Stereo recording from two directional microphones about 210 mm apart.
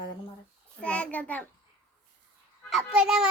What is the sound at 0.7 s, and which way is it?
Speech, 5° left (ahead or behind).